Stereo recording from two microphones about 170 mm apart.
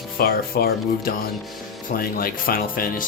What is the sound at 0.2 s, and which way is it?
Speech, 60° left (ahead or behind).